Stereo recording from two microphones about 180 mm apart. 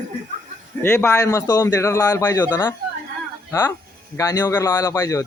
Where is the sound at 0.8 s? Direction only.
15° left (ahead or behind).